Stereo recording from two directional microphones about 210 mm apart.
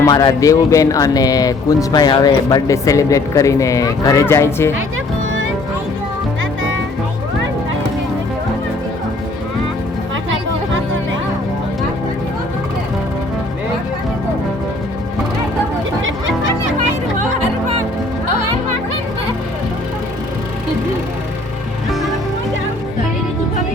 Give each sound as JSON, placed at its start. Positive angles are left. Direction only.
{"t": 0.0, "sound": "speech", "side_deg": 20}
{"t": 16.0, "sound": "music", "side_deg": -65}